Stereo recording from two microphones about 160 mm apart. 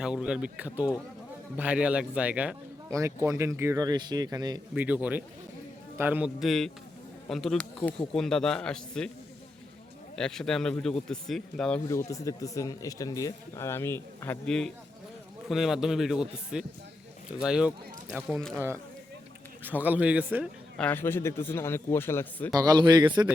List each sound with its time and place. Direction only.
0.0 s speech: 5° right (ahead or behind)
2.9 s speech: 20° right (ahead or behind)
4.7 s speech: 10° right (ahead or behind)
10.2 s speech: 5° left (ahead or behind)
11.9 s speech: 20° left (ahead or behind); by 18.6 s 5° left (ahead or behind)
19.6 s speech: 10° right (ahead or behind)
20.7 s a man's voice: 10° left (ahead or behind)
22.5 s speech: 25° right (ahead or behind)